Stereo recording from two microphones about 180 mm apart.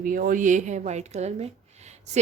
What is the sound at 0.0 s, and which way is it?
Speech, 50° right (ahead or behind).